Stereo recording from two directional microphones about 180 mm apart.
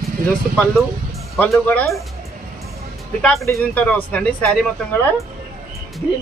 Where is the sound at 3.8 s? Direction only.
5° left (ahead or behind).